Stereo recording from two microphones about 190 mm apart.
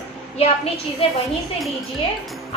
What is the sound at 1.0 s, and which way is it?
Speech, 30° left (ahead or behind).